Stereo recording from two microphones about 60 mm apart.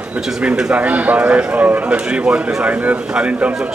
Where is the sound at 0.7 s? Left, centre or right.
Right.